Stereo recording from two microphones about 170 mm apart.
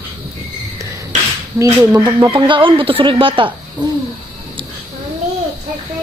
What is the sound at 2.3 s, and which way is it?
Speech, 30° right (ahead or behind).